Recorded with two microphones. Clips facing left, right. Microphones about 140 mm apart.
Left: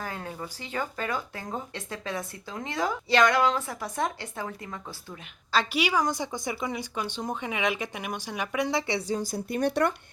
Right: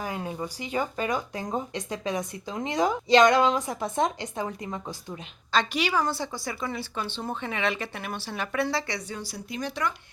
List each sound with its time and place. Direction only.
0.0 s speech: 15° right (ahead or behind)
5.5 s a woman's voice: 5° left (ahead or behind); by 9.0 s 20° left (ahead or behind)
9.0 s speech: 45° left (ahead or behind)